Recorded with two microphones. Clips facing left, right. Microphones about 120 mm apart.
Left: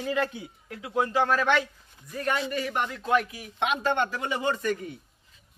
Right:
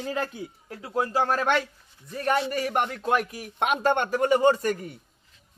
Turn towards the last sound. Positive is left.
turn(degrees=-40)  # may be behind; listen again after turning